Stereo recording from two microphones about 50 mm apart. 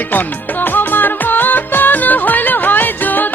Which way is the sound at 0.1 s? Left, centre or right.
Left.